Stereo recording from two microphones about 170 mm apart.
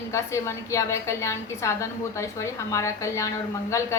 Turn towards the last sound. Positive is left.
turn(degrees=15)  # may be behind; listen again after turning